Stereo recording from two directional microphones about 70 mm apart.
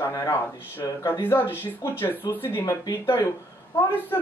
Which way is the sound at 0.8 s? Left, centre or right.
Left.